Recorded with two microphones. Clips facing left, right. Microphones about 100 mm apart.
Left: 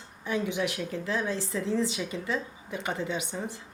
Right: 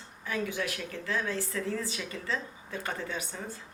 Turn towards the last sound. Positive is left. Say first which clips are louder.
# left 4 dB
turn(degrees=20)  # may be behind; listen again after turning